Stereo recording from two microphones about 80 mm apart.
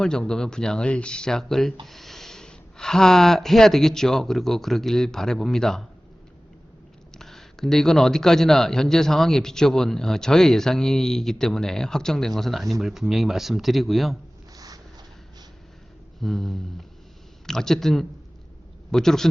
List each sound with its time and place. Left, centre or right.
0.0 s speech: centre
7.2 s speech: centre
14.5 s a sound: right
16.2 s speech: centre